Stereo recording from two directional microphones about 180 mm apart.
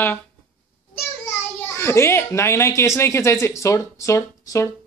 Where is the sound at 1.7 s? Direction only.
15° left (ahead or behind).